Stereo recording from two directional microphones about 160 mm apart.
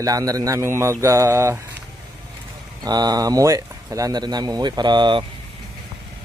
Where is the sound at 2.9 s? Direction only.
25° right (ahead or behind).